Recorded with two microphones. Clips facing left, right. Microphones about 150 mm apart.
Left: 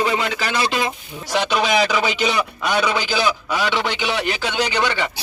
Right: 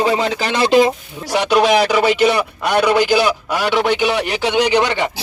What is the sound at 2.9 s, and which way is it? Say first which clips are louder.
Speech: right 9 dB; 60° right (ahead or behind).